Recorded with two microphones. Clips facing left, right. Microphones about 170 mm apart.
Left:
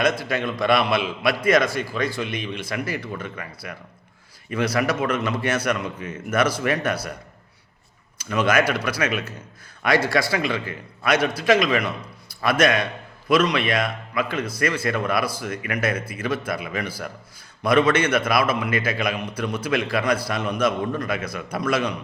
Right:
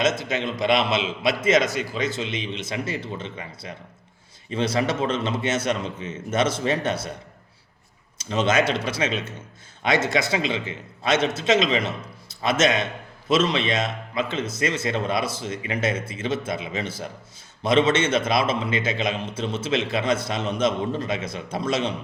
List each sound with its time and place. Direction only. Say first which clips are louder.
0.0 s a man's voice: left 1 dB; 20° right (ahead or behind)
8.2 s a man's voice: left 1 dB; 25° right (ahead or behind)